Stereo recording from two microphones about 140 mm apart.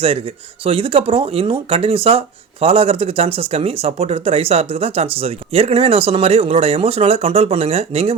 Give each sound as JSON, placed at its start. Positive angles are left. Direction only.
{"t": 0.6, "sound": "speech", "side_deg": -40}